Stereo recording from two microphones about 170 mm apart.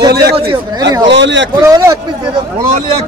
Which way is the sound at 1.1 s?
90° right.